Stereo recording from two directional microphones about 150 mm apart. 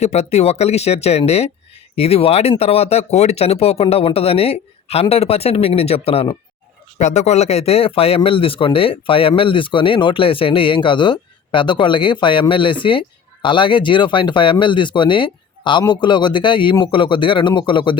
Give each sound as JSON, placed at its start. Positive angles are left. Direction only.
{"t": 0.0, "sound": "speech", "side_deg": 45}